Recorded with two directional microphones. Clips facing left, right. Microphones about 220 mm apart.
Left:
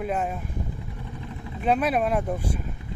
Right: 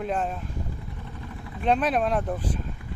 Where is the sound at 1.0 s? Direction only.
20° left (ahead or behind).